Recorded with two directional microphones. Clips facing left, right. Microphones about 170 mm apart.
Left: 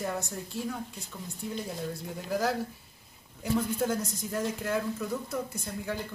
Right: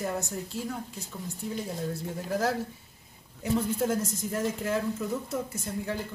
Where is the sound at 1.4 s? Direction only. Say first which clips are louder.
Right 2 dB; centre (ahead or behind).